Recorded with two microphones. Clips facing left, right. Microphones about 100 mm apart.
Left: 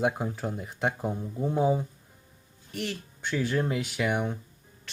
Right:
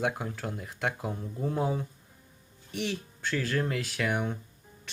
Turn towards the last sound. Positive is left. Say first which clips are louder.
# left 2 dB
turn(degrees=5)  # may be behind; listen again after turning